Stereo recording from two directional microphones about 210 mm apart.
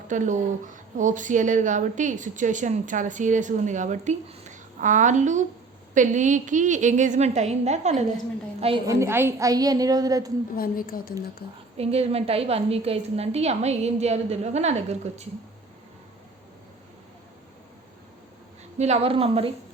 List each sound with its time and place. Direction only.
0.1 s speech: 35° right (ahead or behind)
8.9 s a woman's voice: 10° right (ahead or behind)
10.5 s a woman's voice: 45° left (ahead or behind)
11.8 s speech: 30° right (ahead or behind)
18.8 s a woman's voice: 30° right (ahead or behind)